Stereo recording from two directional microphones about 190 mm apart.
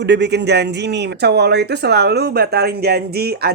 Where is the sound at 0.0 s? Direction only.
65° right (ahead or behind).